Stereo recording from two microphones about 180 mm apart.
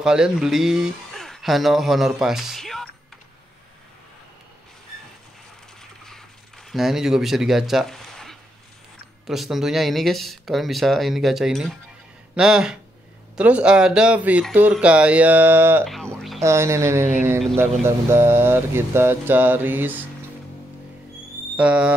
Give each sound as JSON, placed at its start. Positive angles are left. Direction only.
{"t": 0.0, "sound": "speech", "side_deg": -5}
{"t": 6.7, "sound": "speech", "side_deg": 0}
{"t": 15.8, "sound": "music", "side_deg": 5}
{"t": 16.4, "sound": "speech", "side_deg": -15}
{"t": 21.5, "sound": "speech", "side_deg": -5}